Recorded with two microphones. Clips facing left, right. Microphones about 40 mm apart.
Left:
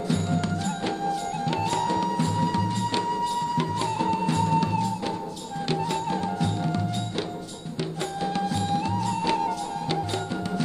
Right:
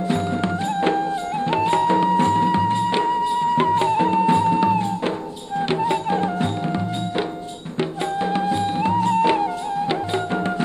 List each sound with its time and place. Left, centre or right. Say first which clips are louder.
0.1 s music: right 3 dB; right